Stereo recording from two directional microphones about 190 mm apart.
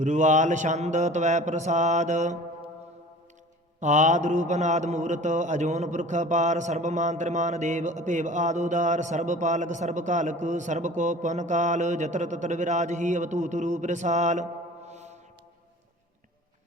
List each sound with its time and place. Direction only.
0.0 s a man's voice: 40° right (ahead or behind)
3.8 s a man's voice: 40° right (ahead or behind)
14.8 s foghorn: 35° right (ahead or behind)